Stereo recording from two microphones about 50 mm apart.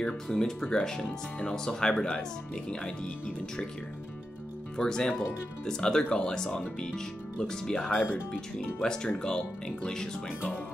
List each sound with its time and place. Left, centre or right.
0.0 s speech: centre
4.7 s speech: centre